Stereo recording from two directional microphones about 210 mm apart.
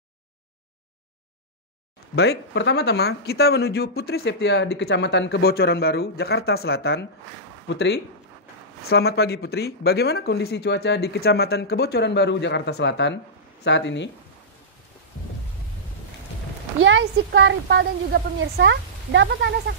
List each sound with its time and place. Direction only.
2.1 s speech: 55° left (ahead or behind)
16.8 s a woman's voice: 65° right (ahead or behind)